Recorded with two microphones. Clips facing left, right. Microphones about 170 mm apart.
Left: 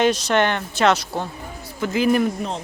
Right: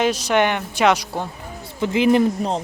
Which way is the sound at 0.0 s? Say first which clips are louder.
Even; 10° right (ahead or behind).